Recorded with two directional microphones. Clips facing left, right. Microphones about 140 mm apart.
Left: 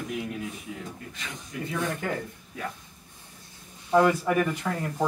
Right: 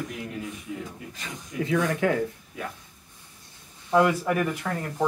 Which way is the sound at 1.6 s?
90° right.